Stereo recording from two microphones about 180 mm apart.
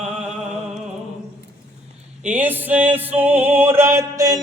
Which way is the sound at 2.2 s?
10° right (ahead or behind).